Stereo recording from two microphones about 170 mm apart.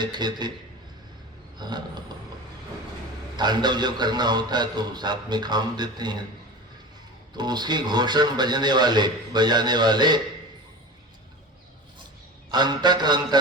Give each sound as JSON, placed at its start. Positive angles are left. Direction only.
{"t": 0.0, "sound": "a man's voice", "side_deg": -25}
{"t": 1.5, "sound": "a man's voice", "side_deg": -25}
{"t": 3.3, "sound": "a man's voice", "side_deg": -25}
{"t": 7.3, "sound": "a man's voice", "side_deg": -25}
{"t": 12.5, "sound": "a man's voice", "side_deg": -25}